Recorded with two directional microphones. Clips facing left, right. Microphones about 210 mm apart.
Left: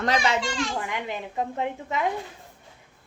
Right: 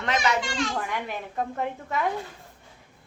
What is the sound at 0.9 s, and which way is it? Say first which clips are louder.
A woman's voice: left 1 dB; 20° left (ahead or behind).